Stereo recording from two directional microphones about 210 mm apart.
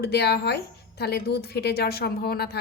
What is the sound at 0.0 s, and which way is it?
A woman's voice, 50° left (ahead or behind).